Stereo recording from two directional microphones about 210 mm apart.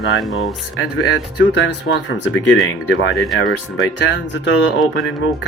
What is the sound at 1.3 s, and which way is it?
Speech, 60° left (ahead or behind).